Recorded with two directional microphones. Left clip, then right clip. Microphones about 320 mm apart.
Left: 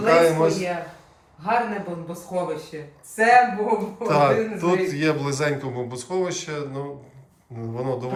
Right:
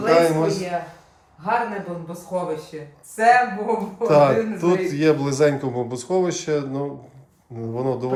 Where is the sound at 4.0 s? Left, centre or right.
Centre.